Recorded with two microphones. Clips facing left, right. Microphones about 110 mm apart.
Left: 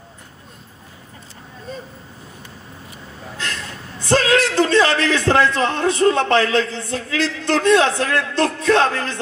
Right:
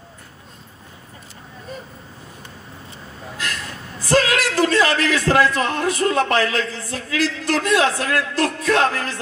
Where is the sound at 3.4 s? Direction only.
25° left (ahead or behind).